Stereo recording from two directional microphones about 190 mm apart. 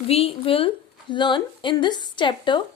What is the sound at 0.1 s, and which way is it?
A woman's voice, 30° left (ahead or behind).